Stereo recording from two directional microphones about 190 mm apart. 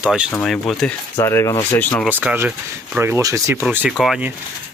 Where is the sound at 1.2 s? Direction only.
15° left (ahead or behind).